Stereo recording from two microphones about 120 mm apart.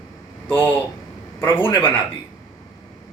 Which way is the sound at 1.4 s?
20° left (ahead or behind).